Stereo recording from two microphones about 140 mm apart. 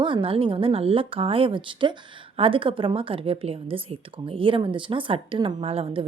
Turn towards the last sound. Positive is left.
turn(degrees=-45)  # may be behind; listen again after turning